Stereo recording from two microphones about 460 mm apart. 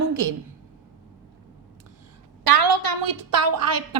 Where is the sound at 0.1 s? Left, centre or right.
Right.